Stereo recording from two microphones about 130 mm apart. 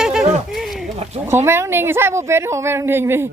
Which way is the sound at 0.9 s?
55° right (ahead or behind).